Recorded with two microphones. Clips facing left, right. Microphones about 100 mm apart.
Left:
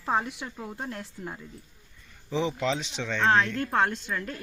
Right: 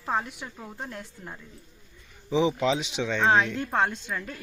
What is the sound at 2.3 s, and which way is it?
Speech, 10° right (ahead or behind).